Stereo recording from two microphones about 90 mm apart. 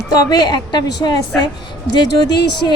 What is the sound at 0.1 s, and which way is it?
A woman's voice, 50° left (ahead or behind).